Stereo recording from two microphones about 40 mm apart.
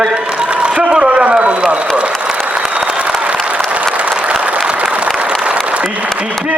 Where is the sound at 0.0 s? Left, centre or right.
Right.